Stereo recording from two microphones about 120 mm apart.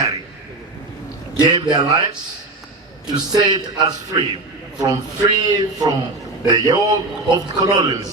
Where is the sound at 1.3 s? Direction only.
35° right (ahead or behind).